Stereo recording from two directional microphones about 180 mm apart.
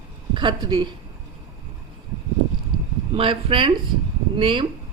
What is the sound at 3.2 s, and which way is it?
A woman's voice, 30° right (ahead or behind).